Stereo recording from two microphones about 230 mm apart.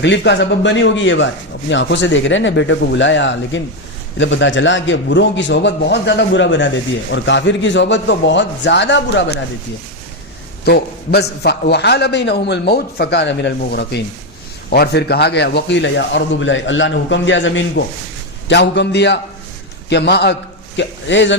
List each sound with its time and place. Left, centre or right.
0.0 s a man's voice: left
10.7 s a man's voice: left